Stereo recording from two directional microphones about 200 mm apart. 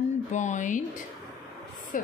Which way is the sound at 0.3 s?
35° left (ahead or behind).